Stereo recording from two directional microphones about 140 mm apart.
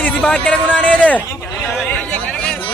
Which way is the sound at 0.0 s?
10° left (ahead or behind).